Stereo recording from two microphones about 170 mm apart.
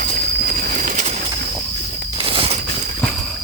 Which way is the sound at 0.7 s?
45° right (ahead or behind).